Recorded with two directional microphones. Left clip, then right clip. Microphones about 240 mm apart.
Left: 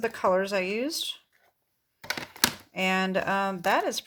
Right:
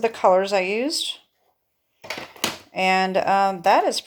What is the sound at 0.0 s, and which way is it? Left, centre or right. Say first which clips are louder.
Speech: right 7 dB; left.